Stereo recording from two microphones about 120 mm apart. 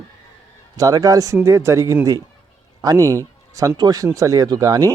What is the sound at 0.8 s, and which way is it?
Speech, 30° right (ahead or behind).